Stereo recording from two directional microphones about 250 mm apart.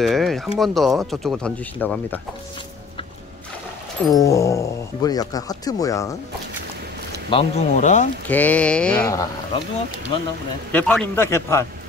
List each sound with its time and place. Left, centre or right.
0.0 s speech: centre
4.1 s speech: centre
7.2 s speech: left
8.3 s speech: centre
10.7 s speech: centre